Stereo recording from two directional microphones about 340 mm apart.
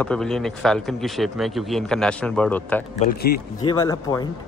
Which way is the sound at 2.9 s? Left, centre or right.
Left.